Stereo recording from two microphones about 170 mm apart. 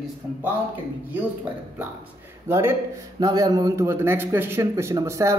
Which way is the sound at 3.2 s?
25° right (ahead or behind).